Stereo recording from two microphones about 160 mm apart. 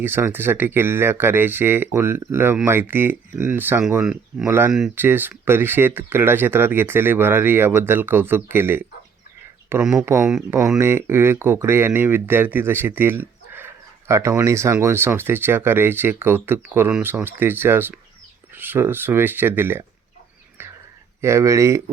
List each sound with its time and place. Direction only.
0.0 s speech: 15° right (ahead or behind)
4.0 s speech: centre (ahead or behind)
4.4 s speech: 15° right (ahead or behind)
21.2 s speech: 15° right (ahead or behind)